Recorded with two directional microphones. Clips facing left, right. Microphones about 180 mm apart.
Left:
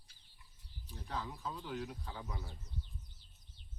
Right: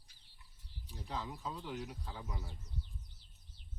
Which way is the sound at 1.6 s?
5° right (ahead or behind).